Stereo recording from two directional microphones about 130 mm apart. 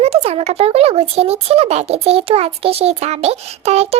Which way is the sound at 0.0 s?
50° right (ahead or behind).